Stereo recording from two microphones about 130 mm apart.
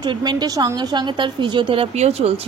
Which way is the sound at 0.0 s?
35° right (ahead or behind).